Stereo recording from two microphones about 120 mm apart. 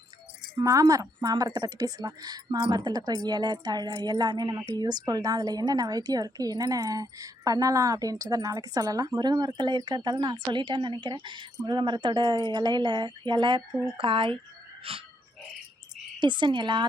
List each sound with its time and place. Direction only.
0.6 s a woman's voice: 30° right (ahead or behind); by 15.0 s 50° right (ahead or behind)
16.2 s a woman's voice: 40° right (ahead or behind)